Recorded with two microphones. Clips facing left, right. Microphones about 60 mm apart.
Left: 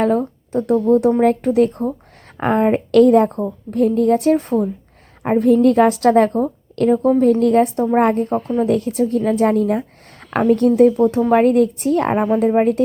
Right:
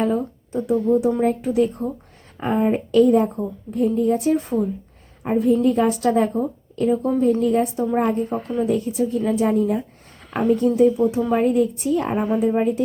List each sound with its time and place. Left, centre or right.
0.0 s a woman's voice: left
4.3 s a woman's voice: left
5.6 s a woman's voice: left
10.8 s a woman's voice: left